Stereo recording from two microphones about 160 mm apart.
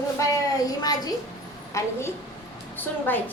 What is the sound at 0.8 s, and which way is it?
A woman's voice, 25° left (ahead or behind).